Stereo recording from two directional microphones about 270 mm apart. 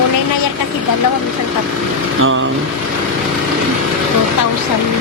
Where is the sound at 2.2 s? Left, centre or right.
Right.